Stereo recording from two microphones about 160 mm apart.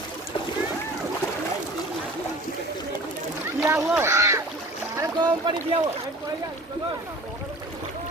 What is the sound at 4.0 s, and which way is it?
Speech, 15° right (ahead or behind).